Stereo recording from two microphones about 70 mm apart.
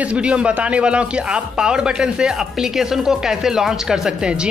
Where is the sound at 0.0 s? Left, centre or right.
Centre.